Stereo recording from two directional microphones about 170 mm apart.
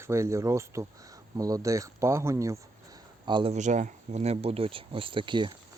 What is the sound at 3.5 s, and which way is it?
Speech, 45° right (ahead or behind).